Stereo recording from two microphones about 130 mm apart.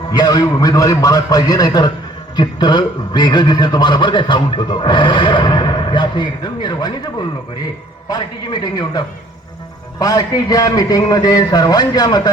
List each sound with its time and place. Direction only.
0.1 s a man's voice: 30° left (ahead or behind)